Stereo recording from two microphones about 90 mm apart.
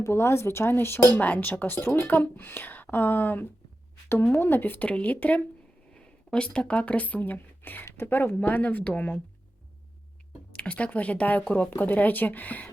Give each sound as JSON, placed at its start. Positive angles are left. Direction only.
{"t": 0.0, "sound": "speech", "side_deg": 30}
{"t": 10.5, "sound": "speech", "side_deg": 15}